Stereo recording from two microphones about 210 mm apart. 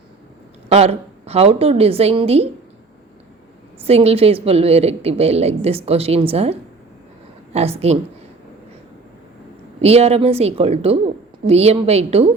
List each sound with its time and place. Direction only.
0.7 s a woman's voice: 30° right (ahead or behind)
3.8 s a woman's voice: 30° right (ahead or behind)
9.8 s a woman's voice: 30° right (ahead or behind)